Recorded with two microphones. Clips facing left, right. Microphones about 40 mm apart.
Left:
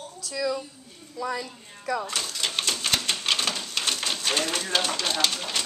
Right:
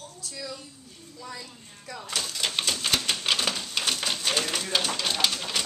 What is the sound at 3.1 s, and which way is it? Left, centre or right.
Typewriter, centre.